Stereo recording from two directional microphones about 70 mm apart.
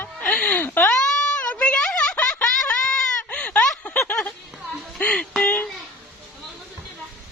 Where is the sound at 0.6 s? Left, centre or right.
Left.